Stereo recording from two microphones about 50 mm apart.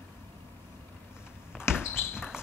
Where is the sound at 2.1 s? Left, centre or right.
Centre.